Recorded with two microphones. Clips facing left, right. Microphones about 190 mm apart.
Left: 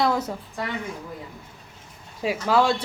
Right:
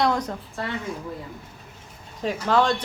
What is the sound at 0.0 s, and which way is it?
Speech, 5° left (ahead or behind).